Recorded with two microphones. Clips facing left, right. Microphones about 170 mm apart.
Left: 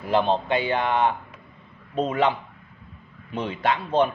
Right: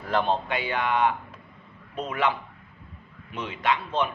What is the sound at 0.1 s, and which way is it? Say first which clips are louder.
Speech: left 4 dB; 20° left (ahead or behind).